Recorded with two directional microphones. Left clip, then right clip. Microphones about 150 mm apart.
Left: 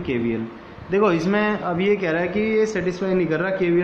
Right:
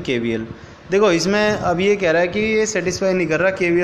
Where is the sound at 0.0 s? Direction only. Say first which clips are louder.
Right 3 dB; 35° right (ahead or behind).